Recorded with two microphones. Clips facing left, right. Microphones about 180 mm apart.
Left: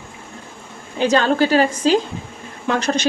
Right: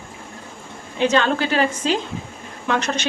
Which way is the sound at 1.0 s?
40° left (ahead or behind).